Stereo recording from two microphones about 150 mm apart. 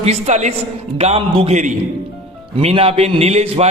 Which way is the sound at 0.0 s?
45° right (ahead or behind).